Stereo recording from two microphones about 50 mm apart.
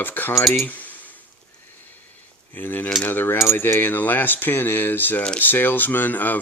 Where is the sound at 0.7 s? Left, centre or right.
Left.